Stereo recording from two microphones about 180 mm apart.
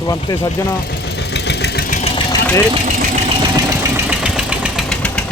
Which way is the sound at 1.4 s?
65° left (ahead or behind).